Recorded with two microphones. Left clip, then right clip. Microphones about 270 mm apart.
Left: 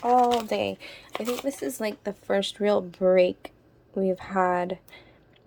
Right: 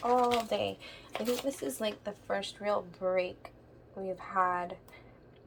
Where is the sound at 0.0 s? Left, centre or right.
Centre.